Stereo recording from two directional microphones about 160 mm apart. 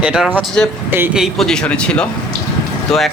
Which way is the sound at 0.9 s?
10° right (ahead or behind).